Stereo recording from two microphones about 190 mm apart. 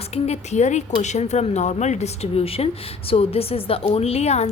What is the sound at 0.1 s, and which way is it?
A woman's voice, 35° left (ahead or behind).